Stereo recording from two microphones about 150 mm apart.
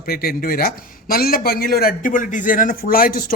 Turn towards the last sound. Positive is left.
turn(degrees=75)  # may be behind; listen again after turning